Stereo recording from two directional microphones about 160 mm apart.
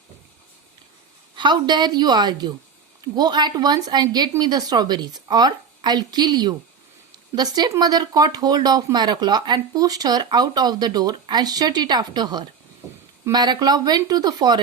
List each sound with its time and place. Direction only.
1.4 s speech: 25° right (ahead or behind)